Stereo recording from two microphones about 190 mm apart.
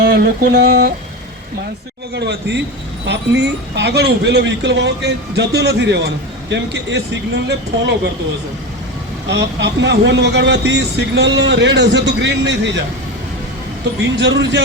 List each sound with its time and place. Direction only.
0.0 s mantra: 55° right (ahead or behind)
2.1 s speech: 65° right (ahead or behind)
9.3 s speech: 65° right (ahead or behind)
14.0 s speech: 65° right (ahead or behind)